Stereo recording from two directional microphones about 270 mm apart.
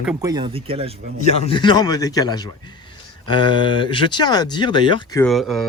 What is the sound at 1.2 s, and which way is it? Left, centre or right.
Speech, left.